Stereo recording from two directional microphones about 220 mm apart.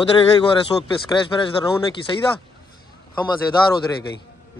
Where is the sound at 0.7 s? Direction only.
15° left (ahead or behind).